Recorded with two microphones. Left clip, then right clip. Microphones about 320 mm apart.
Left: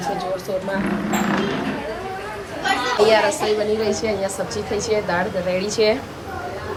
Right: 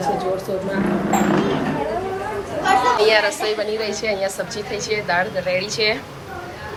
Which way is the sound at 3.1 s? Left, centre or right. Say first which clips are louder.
Even; centre.